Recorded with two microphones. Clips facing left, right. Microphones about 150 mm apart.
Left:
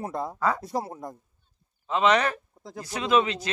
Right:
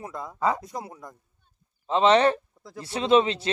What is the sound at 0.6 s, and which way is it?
Speech, 35° left (ahead or behind).